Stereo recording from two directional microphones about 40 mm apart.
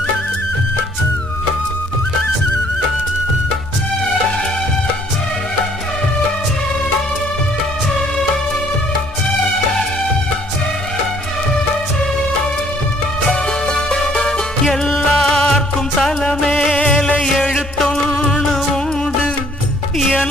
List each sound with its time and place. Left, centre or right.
13.7 s music: left
14.7 s music: centre